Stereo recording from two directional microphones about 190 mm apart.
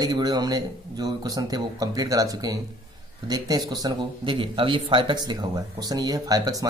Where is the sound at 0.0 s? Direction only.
20° right (ahead or behind).